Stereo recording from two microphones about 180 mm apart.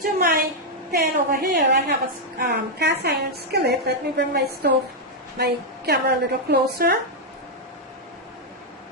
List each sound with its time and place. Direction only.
0.0 s a woman's voice: 50° right (ahead or behind)
0.9 s a woman's voice: 65° right (ahead or behind)